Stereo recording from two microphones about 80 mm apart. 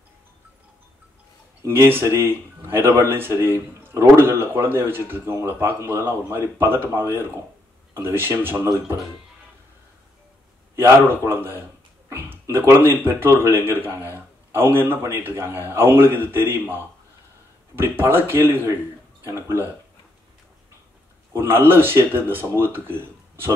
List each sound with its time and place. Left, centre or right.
1.6 s a man's voice: right
10.8 s a man's voice: right
21.3 s speech: right